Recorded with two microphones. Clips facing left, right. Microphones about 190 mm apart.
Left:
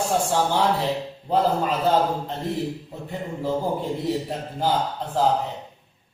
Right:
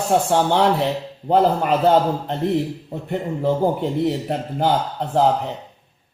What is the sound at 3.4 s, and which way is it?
A man's voice, 65° right (ahead or behind).